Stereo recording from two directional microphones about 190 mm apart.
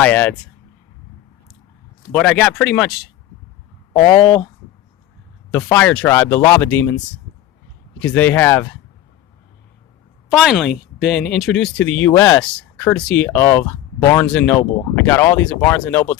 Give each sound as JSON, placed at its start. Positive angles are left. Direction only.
{"t": 0.0, "sound": "speech", "side_deg": 10}
{"t": 2.4, "sound": "speech", "side_deg": 5}
{"t": 3.9, "sound": "speech", "side_deg": 10}
{"t": 5.5, "sound": "speech", "side_deg": 15}
{"t": 10.2, "sound": "speech", "side_deg": -5}